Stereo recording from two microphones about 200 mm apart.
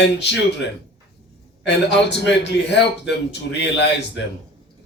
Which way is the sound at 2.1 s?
60° left (ahead or behind).